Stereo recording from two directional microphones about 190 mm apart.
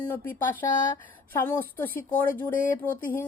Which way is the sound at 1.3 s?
10° left (ahead or behind).